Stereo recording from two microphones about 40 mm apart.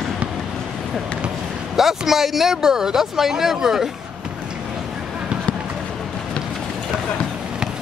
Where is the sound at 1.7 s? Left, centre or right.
Centre.